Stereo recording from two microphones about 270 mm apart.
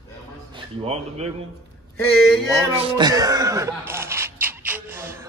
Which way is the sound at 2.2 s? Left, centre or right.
Centre.